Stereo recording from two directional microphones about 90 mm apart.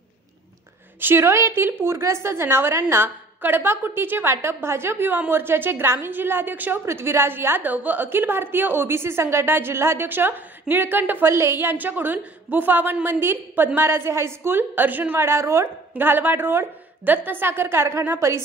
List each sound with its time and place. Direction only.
1.0 s a woman's voice: 30° right (ahead or behind)